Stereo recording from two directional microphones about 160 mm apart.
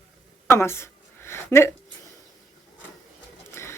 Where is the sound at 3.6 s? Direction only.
15° left (ahead or behind).